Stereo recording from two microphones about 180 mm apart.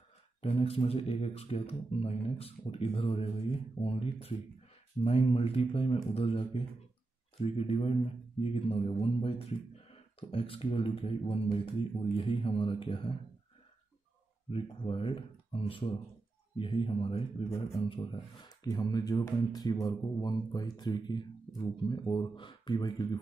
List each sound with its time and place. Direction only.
0.4 s speech: 35° left (ahead or behind)
14.5 s speech: 30° left (ahead or behind)